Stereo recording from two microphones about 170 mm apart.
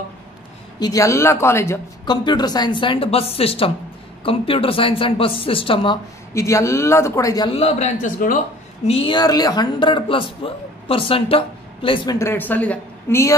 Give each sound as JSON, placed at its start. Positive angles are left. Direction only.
{"t": 0.7, "sound": "a woman's voice", "side_deg": 20}
{"t": 6.3, "sound": "a woman's voice", "side_deg": 15}
{"t": 7.5, "sound": "speech", "side_deg": 40}
{"t": 8.8, "sound": "speech", "side_deg": 35}
{"t": 12.2, "sound": "a woman's voice", "side_deg": 15}